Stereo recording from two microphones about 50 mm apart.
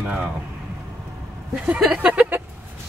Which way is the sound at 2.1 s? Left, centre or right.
Right.